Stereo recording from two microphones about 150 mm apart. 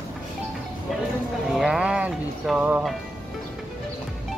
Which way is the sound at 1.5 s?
5° right (ahead or behind).